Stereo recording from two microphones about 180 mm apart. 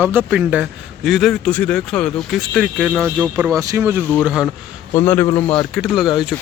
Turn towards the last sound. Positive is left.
turn(degrees=0)  # may be behind; listen again after turning